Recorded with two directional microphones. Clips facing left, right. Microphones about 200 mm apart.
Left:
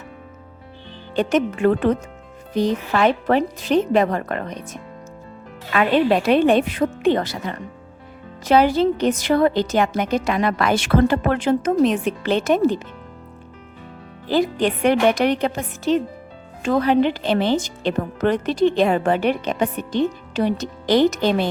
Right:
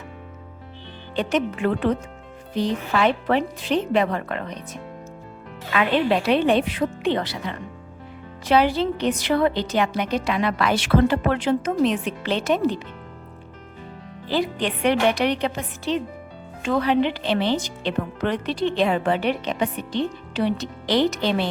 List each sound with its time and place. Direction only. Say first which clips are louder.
1.1 s speech: left 4 dB; 45° left (ahead or behind)
14.3 s speech: left 5 dB; 45° left (ahead or behind)